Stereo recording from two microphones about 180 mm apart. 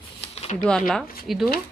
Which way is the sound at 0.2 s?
35° left (ahead or behind).